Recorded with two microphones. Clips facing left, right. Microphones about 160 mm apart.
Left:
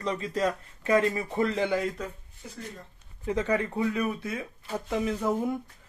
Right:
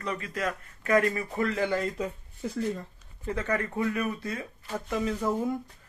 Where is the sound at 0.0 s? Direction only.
30° left (ahead or behind).